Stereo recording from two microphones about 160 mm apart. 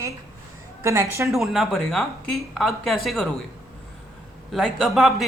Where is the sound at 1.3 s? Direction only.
Centre (ahead or behind).